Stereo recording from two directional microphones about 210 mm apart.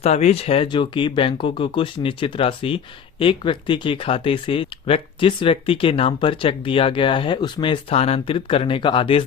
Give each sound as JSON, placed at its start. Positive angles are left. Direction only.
{"t": 0.0, "sound": "speech", "side_deg": 30}